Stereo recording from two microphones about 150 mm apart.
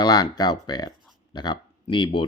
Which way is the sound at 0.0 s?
25° left (ahead or behind).